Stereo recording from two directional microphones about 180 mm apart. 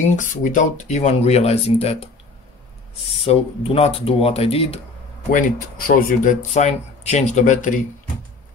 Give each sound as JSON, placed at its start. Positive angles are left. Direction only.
{"t": 0.1, "sound": "speech", "side_deg": 45}
{"t": 3.1, "sound": "speech", "side_deg": 35}
{"t": 5.3, "sound": "speech", "side_deg": 50}